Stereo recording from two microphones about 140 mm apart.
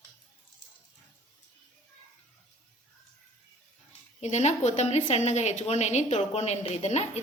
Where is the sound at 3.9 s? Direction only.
55° left (ahead or behind).